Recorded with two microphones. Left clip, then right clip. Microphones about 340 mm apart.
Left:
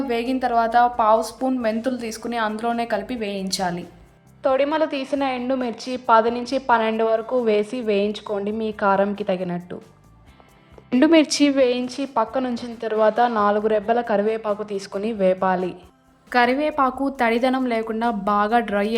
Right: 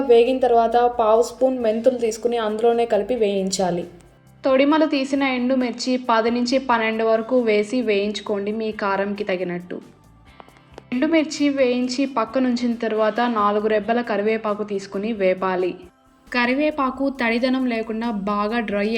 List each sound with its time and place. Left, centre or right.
0.1 s a woman's voice: centre
4.4 s a woman's voice: left
10.9 s a woman's voice: left
16.3 s a woman's voice: centre